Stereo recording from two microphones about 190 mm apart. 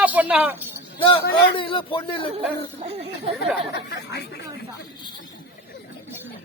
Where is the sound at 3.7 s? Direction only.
60° left (ahead or behind).